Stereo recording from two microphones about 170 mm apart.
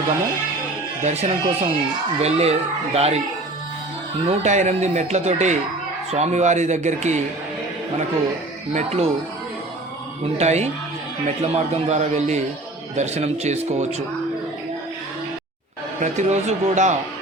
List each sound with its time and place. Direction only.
1.0 s speech: 35° right (ahead or behind)
4.3 s speech: 45° right (ahead or behind)
8.7 s speech: 40° right (ahead or behind)
10.3 s speech: 40° right (ahead or behind)
16.0 s speech: 45° right (ahead or behind)